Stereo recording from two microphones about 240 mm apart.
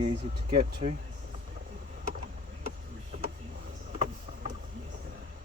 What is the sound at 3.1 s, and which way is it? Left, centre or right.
Vehicle, right.